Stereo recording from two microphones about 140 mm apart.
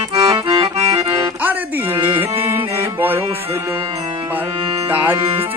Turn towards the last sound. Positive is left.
turn(degrees=-10)  # may be behind; listen again after turning